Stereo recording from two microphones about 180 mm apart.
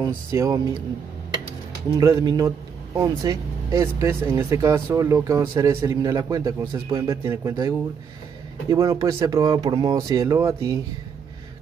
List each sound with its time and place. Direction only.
0.0 s speech: 15° right (ahead or behind)
2.0 s speech: 20° right (ahead or behind)